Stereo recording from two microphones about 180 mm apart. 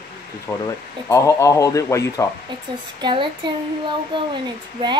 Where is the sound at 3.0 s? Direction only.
25° right (ahead or behind).